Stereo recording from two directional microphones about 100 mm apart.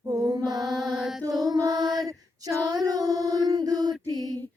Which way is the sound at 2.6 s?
40° right (ahead or behind).